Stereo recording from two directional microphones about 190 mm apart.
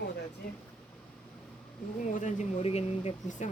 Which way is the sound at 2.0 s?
40° left (ahead or behind).